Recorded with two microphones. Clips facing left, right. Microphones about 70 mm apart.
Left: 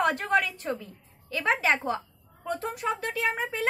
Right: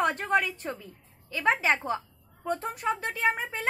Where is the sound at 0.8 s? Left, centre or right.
Centre.